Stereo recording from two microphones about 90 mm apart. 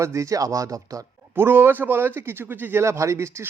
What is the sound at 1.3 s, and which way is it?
Speech, 25° right (ahead or behind).